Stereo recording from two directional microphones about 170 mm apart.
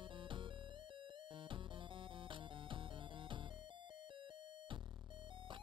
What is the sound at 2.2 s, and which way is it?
Music, 30° right (ahead or behind).